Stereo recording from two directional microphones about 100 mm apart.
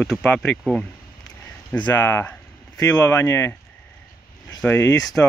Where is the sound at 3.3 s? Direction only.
25° left (ahead or behind).